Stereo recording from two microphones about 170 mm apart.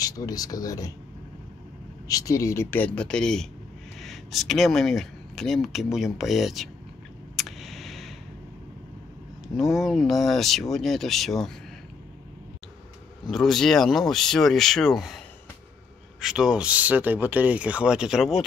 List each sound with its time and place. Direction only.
0.0 s speech: 20° left (ahead or behind)
2.0 s speech: 20° left (ahead or behind); by 6.7 s centre (ahead or behind)
7.3 s a sound: centre (ahead or behind)
9.6 s speech: centre (ahead or behind)
13.3 s speech: centre (ahead or behind)